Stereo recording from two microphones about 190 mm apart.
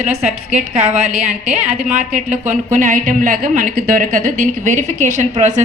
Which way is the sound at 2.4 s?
40° right (ahead or behind).